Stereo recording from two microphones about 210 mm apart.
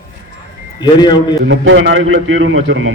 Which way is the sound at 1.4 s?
65° right (ahead or behind).